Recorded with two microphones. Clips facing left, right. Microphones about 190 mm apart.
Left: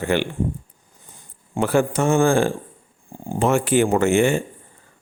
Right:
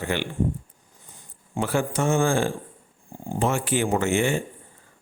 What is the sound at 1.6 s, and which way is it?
A man's voice, 55° left (ahead or behind).